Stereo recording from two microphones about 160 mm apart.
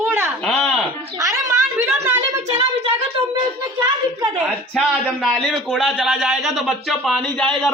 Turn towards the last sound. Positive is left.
turn(degrees=5)  # may be behind; listen again after turning